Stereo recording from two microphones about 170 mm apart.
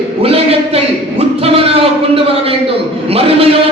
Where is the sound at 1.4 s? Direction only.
35° right (ahead or behind).